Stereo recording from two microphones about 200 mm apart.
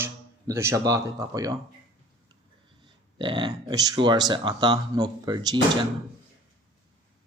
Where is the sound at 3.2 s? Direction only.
20° right (ahead or behind).